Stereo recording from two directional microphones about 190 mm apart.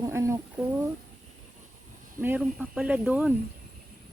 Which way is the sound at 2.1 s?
10° right (ahead or behind).